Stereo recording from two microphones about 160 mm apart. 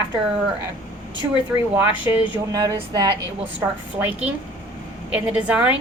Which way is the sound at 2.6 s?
25° right (ahead or behind).